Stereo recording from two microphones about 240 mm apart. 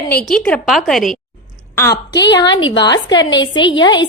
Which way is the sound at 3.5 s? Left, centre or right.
Centre.